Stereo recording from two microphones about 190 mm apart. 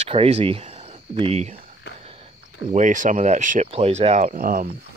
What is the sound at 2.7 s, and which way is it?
Speech, 40° right (ahead or behind).